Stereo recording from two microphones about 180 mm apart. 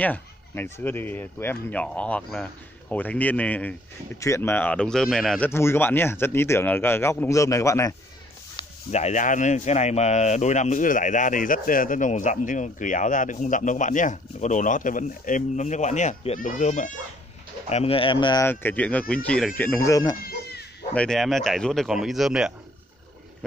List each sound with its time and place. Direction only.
0.0 s speech: 10° left (ahead or behind)
5.5 s speech: 15° left (ahead or behind)
8.6 s a sound: 25° left (ahead or behind)
8.9 s speech: 40° left (ahead or behind)
17.6 s speech: 35° left (ahead or behind)
18.5 s speech: 10° left (ahead or behind)
20.9 s speech: 5° left (ahead or behind)